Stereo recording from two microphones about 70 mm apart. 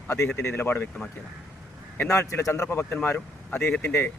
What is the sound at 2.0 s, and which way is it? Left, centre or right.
Speech, left.